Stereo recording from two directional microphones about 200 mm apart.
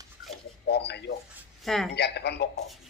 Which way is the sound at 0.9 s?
55° left (ahead or behind).